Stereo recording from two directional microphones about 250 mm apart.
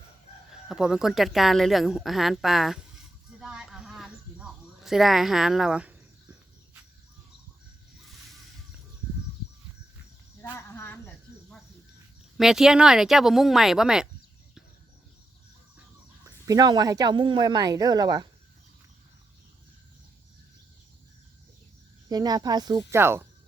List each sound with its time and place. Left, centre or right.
0.5 s a woman's voice: centre
3.4 s a sound: centre
10.4 s cricket: centre
12.4 s a woman's voice: centre
16.2 s speech: centre
22.1 s speech: centre